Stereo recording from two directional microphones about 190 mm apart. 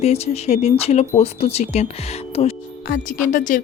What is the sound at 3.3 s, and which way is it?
Speech, 40° left (ahead or behind).